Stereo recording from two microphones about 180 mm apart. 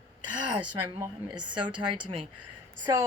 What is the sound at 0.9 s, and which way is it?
Speech, 20° right (ahead or behind).